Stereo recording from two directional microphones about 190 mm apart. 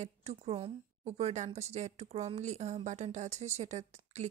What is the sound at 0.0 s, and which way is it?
A woman's voice, 35° right (ahead or behind).